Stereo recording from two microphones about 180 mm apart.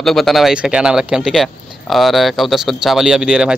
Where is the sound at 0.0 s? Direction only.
Centre (ahead or behind).